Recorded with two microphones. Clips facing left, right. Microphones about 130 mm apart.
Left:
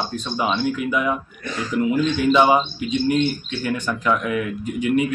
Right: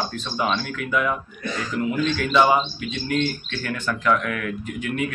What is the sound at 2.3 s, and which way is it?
Speech, 20° left (ahead or behind).